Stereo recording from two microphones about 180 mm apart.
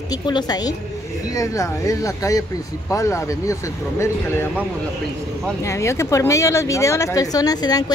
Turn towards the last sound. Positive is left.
turn(degrees=20)  # may be behind; listen again after turning